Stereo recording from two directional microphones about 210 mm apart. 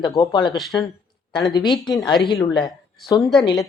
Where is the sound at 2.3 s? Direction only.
20° left (ahead or behind).